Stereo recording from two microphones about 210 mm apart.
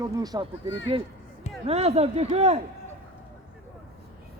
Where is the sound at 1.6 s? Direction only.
30° right (ahead or behind).